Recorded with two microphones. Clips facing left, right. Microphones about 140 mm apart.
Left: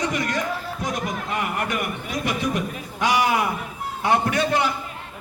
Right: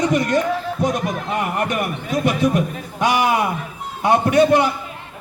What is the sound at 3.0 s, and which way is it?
A man's voice, 20° right (ahead or behind).